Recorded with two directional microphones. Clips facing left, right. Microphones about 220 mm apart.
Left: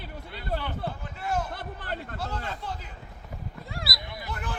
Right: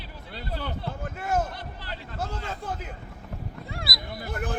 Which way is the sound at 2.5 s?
50° right (ahead or behind).